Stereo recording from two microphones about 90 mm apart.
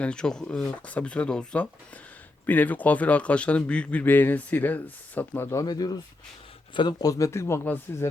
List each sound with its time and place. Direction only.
0.0 s speech: 10° left (ahead or behind)
5.5 s speech: 45° left (ahead or behind); by 8.0 s 25° left (ahead or behind)